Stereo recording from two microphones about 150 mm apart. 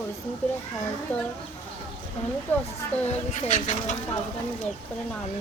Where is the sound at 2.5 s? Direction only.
15° left (ahead or behind).